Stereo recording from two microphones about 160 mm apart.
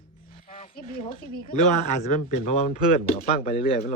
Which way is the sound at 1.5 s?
45° left (ahead or behind).